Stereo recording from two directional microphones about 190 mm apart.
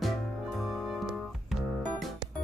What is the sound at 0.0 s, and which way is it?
Music, centre (ahead or behind).